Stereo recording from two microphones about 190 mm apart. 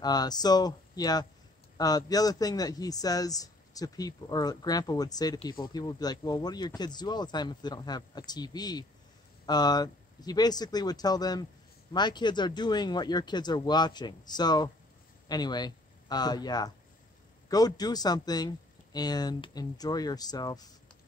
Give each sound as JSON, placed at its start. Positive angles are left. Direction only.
{"t": 0.0, "sound": "speech", "side_deg": 20}